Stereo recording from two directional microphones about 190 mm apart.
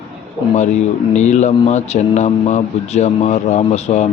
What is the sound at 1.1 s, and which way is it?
Speech, 35° left (ahead or behind).